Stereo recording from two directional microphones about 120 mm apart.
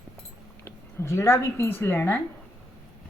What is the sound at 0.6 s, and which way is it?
Speech, 20° left (ahead or behind).